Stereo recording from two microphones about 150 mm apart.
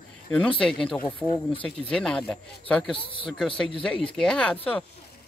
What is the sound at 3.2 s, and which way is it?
Speech, 5° left (ahead or behind).